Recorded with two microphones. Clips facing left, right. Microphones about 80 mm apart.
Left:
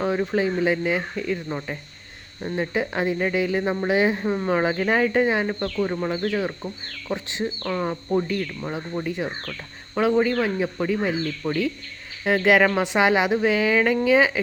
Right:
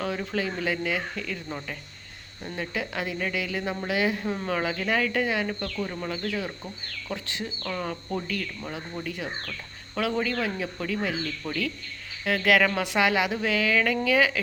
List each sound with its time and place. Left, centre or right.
0.0 s speech: left